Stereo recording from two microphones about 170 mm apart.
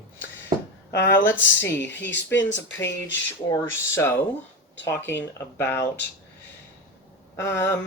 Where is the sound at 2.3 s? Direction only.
90° left.